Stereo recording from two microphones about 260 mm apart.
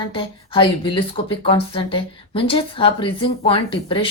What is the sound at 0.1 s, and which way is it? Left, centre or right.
Speech, centre.